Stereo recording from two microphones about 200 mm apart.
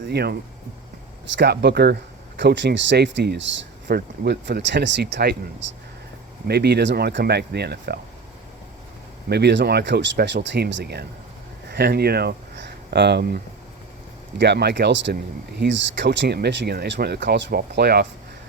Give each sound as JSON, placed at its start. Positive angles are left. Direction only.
{"t": 0.1, "sound": "speech", "side_deg": -55}
{"t": 1.4, "sound": "speech", "side_deg": -55}
{"t": 9.3, "sound": "speech", "side_deg": -60}